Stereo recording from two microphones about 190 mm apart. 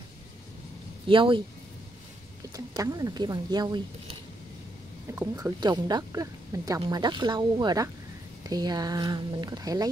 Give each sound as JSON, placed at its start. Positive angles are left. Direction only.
{"t": 1.0, "sound": "speech", "side_deg": -25}
{"t": 2.5, "sound": "speech", "side_deg": -20}
{"t": 5.1, "sound": "speech", "side_deg": -15}